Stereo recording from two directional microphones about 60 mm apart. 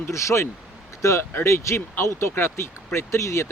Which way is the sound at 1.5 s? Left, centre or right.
Left.